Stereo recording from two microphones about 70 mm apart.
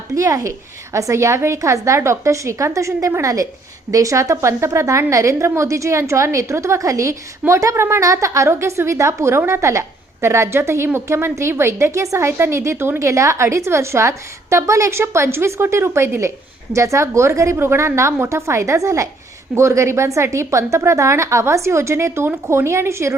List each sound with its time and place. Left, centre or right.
0.1 s a woman's voice: right